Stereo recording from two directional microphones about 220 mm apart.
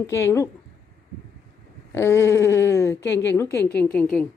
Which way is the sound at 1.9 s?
10° left (ahead or behind).